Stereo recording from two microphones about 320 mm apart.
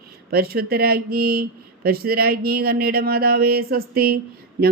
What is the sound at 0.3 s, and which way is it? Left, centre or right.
Speech, right.